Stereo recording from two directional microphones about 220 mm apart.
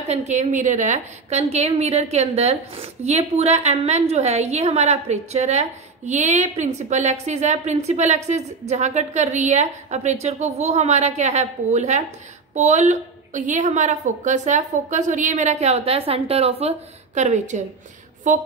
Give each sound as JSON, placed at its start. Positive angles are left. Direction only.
{"t": 0.1, "sound": "a woman's voice", "side_deg": -30}